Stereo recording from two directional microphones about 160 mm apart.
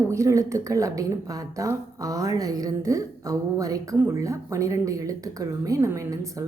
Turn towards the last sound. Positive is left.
turn(degrees=-20)  # may be behind; listen again after turning